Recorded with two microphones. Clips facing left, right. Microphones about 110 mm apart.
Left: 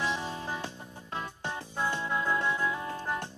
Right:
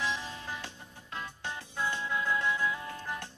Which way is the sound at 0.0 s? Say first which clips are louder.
Left 3 dB; 30° left (ahead or behind).